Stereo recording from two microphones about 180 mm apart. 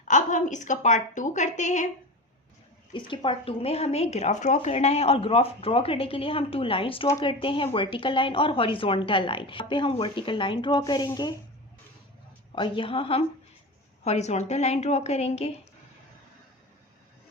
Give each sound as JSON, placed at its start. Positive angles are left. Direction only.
{"t": 0.0, "sound": "a woman's voice", "side_deg": 45}
{"t": 3.1, "sound": "speech", "side_deg": 30}
{"t": 12.5, "sound": "speech", "side_deg": 25}